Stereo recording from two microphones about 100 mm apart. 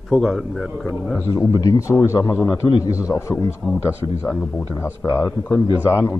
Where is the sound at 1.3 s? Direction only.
40° left (ahead or behind).